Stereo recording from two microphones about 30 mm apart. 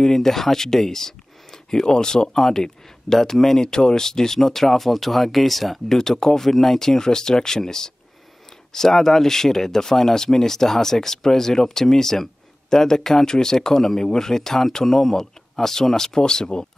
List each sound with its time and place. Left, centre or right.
0.0 s speech: centre
5.9 s speech: centre